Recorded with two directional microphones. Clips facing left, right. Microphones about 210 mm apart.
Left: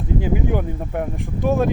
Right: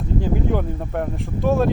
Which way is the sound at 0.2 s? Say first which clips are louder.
Right 1 dB; 5° left (ahead or behind).